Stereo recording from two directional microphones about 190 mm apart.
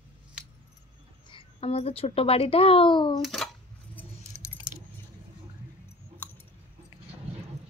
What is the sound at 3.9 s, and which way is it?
Keys jangling, 10° left (ahead or behind).